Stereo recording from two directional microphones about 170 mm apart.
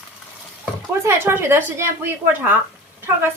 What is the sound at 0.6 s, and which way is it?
Speech, 15° right (ahead or behind).